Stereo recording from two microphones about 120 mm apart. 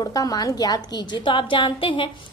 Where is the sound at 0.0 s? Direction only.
30° left (ahead or behind).